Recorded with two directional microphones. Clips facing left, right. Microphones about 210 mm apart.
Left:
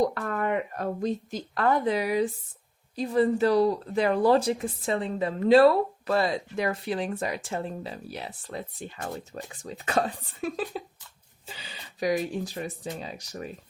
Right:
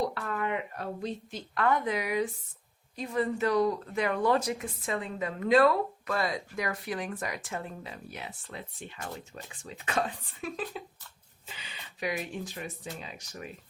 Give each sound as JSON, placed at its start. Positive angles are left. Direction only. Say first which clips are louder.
{"t": 0.0, "sound": "speech", "louder": "left 5 dB", "side_deg": 45}